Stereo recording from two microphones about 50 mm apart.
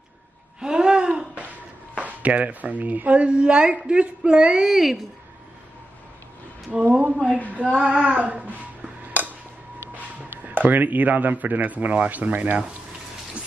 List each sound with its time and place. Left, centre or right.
0.6 s gasp: centre
2.0 s speech: right
4.6 s a woman's voice: centre
6.7 s speech: right
10.4 s a man's voice: right